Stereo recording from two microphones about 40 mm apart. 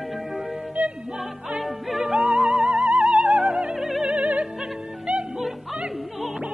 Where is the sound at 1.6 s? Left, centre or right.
Centre.